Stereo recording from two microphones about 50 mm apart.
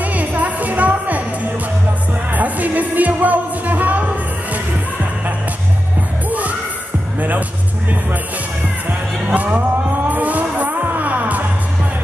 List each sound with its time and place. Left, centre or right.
0.0 s music: right
2.3 s music: right
7.2 s music: right
9.3 s music: right